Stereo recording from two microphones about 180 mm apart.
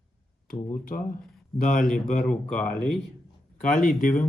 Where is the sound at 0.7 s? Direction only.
50° left (ahead or behind).